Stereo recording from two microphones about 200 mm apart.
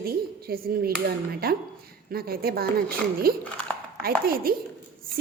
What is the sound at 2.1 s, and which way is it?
A woman's voice, 50° right (ahead or behind).